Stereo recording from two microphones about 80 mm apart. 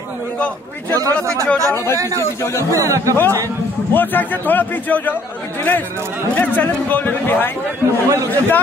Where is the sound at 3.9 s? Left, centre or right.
Left.